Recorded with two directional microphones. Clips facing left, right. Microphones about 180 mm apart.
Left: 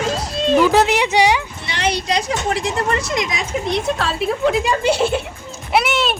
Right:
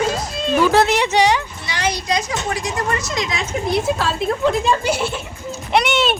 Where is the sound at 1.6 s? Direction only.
25° left (ahead or behind).